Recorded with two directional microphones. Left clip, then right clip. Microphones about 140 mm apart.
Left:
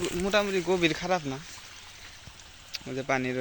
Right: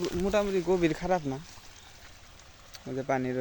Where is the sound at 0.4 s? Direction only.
25° right (ahead or behind).